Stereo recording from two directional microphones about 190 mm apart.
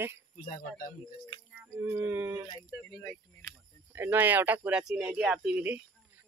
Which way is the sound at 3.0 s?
10° left (ahead or behind).